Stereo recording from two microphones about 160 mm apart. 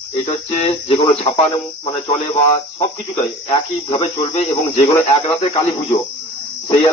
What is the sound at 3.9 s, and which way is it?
Speech, 35° left (ahead or behind).